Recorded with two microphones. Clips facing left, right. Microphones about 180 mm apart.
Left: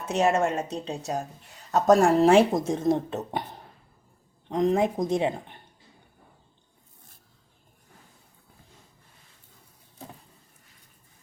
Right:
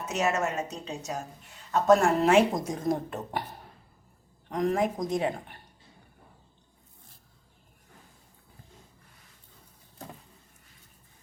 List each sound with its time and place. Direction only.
0.0 s a woman's voice: 30° left (ahead or behind)
4.4 s speech: 25° left (ahead or behind)